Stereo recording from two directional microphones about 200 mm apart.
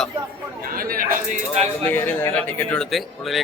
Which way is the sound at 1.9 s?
10° left (ahead or behind).